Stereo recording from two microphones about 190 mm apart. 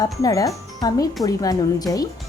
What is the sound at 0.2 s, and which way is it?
Speech, 15° left (ahead or behind).